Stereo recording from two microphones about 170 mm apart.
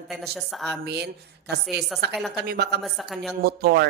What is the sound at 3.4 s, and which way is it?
Speech, 70° right (ahead or behind).